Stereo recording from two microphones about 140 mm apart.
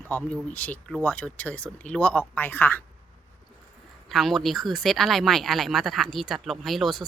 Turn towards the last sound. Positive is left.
turn(degrees=0)  # may be behind; listen again after turning